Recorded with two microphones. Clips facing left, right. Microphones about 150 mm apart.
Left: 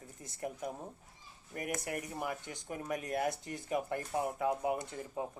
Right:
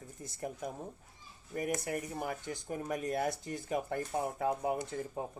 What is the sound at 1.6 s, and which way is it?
Speech, 30° right (ahead or behind).